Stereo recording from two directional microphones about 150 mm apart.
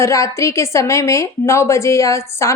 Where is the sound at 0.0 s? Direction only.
20° left (ahead or behind).